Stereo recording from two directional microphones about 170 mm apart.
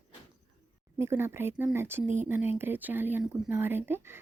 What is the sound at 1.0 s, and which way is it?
Speech, 15° right (ahead or behind).